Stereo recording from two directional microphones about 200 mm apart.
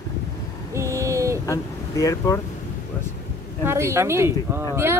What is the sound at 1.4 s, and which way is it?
Speech, 15° left (ahead or behind).